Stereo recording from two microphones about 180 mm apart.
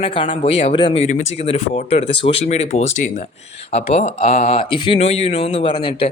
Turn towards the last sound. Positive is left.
turn(degrees=35)  # may be behind; listen again after turning